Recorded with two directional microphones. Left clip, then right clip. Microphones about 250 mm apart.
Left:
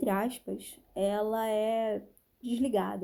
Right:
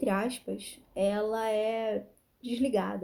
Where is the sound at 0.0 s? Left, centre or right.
Left.